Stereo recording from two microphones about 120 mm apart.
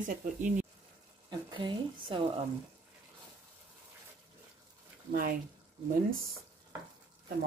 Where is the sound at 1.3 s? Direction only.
40° right (ahead or behind).